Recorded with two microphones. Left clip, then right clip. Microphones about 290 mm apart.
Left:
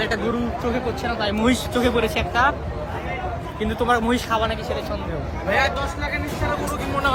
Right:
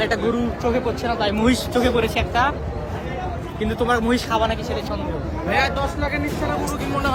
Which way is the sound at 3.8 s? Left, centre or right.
Centre.